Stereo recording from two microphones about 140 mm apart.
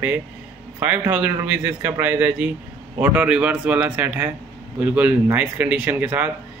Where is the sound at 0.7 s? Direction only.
10° right (ahead or behind).